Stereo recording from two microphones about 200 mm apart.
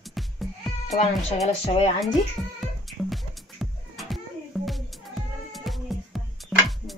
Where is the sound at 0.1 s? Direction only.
Centre (ahead or behind).